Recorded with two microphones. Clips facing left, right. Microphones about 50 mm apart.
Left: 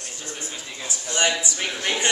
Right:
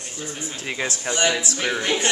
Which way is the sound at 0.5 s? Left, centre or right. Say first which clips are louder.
Right 7 dB; right.